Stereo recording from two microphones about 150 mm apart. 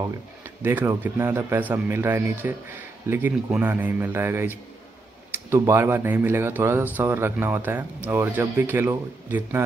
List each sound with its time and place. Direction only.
0.6 s speech: 15° right (ahead or behind)